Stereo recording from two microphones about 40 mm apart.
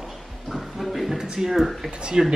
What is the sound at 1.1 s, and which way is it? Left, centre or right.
Speech, centre.